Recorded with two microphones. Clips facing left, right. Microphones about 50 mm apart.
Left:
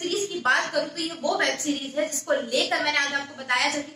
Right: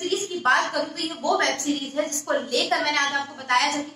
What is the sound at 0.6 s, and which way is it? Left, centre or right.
Speech, right.